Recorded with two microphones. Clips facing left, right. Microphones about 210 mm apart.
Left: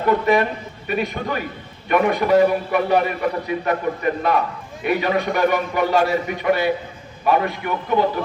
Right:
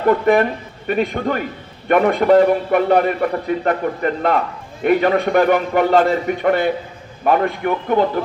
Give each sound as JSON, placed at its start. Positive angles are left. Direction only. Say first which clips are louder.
{"t": 0.3, "sound": "a man's voice", "louder": "right 3 dB", "side_deg": -55}